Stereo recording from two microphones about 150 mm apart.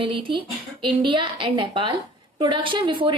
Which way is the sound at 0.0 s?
35° right (ahead or behind).